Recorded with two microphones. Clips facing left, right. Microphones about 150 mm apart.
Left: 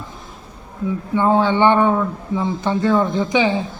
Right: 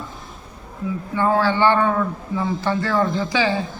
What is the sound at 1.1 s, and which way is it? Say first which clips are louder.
Speech: left 3 dB; 20° left (ahead or behind).